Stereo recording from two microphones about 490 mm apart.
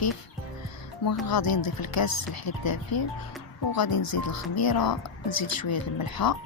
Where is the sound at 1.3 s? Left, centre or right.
Left.